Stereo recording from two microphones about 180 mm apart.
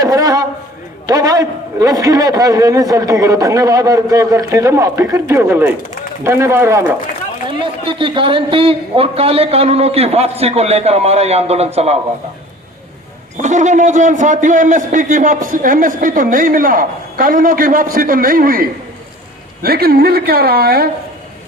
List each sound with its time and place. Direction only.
0.0 s a sound: 20° right (ahead or behind)
1.0 s a man's voice: 20° right (ahead or behind)
7.6 s a man's voice: 25° right (ahead or behind)
13.3 s a man's voice: 40° right (ahead or behind); by 20.9 s 60° right (ahead or behind)